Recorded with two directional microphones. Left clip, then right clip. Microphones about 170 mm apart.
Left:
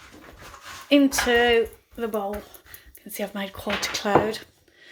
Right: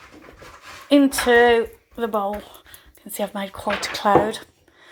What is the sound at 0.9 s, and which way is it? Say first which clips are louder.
Speech: right 3 dB; centre (ahead or behind).